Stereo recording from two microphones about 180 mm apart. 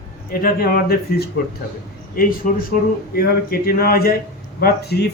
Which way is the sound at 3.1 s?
55° left (ahead or behind).